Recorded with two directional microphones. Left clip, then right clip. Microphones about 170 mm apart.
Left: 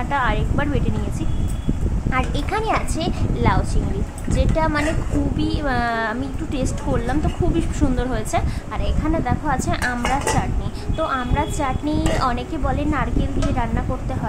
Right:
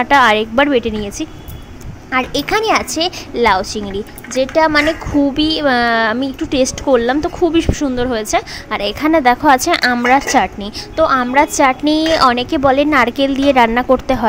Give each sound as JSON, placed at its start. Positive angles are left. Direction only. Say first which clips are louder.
{"t": 0.0, "sound": "a woman's voice", "louder": "right 12 dB", "side_deg": -50}
{"t": 2.1, "sound": "a woman's voice", "louder": "right 8 dB", "side_deg": -40}